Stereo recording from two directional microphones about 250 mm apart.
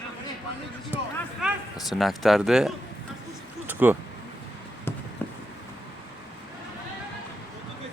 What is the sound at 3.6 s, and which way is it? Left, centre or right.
Vehicle, centre.